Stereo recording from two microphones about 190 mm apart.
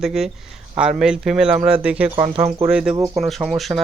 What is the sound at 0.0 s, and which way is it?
Speech, centre (ahead or behind).